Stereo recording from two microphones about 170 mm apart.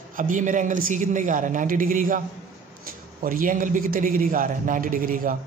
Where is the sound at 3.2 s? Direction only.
55° right (ahead or behind).